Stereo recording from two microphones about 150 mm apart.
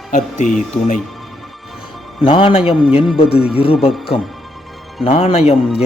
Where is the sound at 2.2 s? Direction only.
35° left (ahead or behind).